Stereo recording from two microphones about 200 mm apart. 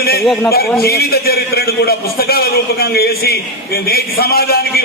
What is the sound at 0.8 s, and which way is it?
A man's voice, 50° left (ahead or behind).